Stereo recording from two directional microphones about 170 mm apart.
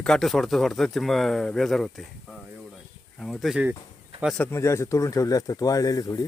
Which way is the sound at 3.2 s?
Centre (ahead or behind).